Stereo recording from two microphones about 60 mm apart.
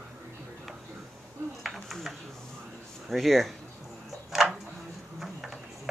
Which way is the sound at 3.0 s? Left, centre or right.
Centre.